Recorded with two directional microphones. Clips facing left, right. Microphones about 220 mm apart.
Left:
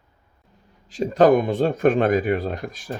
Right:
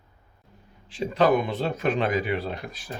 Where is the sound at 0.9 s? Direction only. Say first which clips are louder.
Left 6 dB; 45° left (ahead or behind).